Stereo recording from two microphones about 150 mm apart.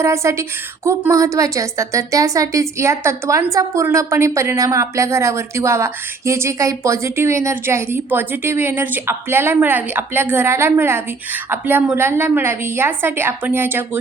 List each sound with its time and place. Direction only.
0.0 s a woman's voice: 20° right (ahead or behind)